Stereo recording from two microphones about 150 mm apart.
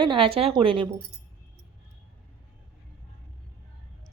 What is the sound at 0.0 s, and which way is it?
Speech, 35° right (ahead or behind).